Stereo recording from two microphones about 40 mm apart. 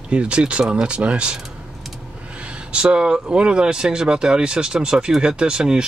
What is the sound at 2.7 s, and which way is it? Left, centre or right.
Speech, right.